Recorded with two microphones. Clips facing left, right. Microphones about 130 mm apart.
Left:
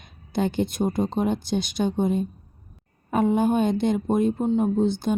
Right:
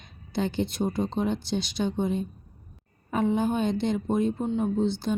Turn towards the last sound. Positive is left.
turn(degrees=50)  # may be behind; listen again after turning